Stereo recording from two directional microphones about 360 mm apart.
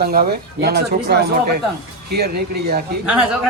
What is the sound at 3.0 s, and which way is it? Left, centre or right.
Speech, centre.